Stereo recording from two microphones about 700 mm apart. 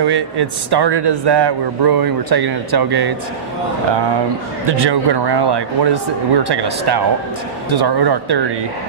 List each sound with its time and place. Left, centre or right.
0.0 s speech: right
4.8 s speech: right